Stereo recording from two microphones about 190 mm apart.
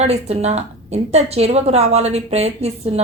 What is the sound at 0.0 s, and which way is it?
A woman's voice, 35° right (ahead or behind).